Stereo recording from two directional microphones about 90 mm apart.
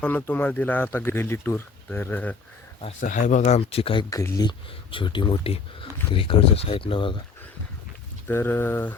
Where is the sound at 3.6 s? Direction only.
90° left; by 7.2 s 75° left (ahead or behind).